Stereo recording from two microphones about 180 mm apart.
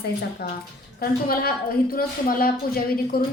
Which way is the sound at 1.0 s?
60° left (ahead or behind).